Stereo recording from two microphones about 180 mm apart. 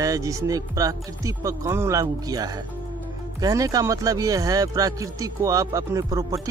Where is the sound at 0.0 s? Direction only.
20° right (ahead or behind).